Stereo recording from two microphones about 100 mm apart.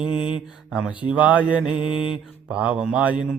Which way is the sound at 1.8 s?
55° left (ahead or behind).